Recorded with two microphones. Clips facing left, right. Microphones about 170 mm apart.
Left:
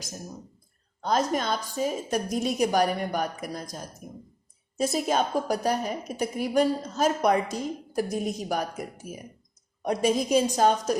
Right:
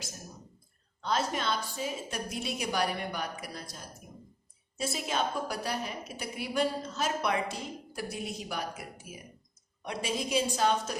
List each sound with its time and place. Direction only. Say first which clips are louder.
1.0 s a woman's voice: left 5 dB; 40° left (ahead or behind)